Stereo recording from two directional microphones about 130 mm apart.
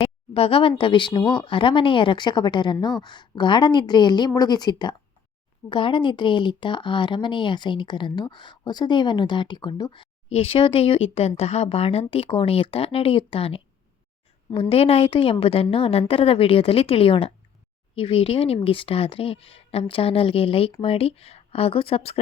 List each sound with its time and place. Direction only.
0.0 s a sound: 45° left (ahead or behind)
0.8 s speech: 40° left (ahead or behind)
10.2 s speech: 50° left (ahead or behind)